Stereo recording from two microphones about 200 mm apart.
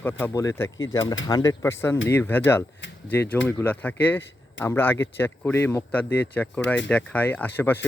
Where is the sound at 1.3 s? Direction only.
15° left (ahead or behind).